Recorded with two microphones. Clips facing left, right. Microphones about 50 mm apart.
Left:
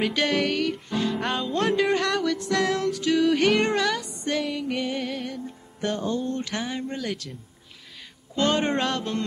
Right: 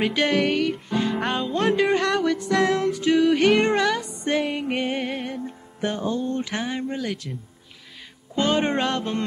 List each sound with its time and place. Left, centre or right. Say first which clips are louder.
0.0 s music: right 2 dB; centre
4.9 s music: right 2 dB; right
6.1 s a sound: right 2 dB; centre
6.4 s music: right 2 dB; centre
8.4 s music: right 1 dB; centre